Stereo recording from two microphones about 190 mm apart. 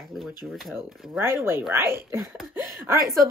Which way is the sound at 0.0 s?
Centre (ahead or behind).